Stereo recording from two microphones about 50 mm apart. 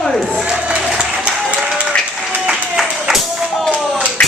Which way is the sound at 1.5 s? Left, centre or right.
Right.